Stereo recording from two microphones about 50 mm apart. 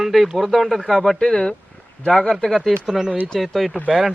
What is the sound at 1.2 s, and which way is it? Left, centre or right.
Speech, centre.